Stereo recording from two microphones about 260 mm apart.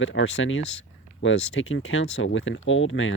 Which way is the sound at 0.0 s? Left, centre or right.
Left.